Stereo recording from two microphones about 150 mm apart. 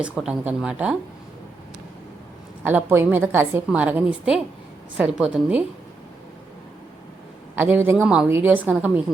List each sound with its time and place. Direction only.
0.0 s a woman's voice: 5° right (ahead or behind)
2.6 s a woman's voice: 15° right (ahead or behind)
7.5 s a man's voice: 10° right (ahead or behind)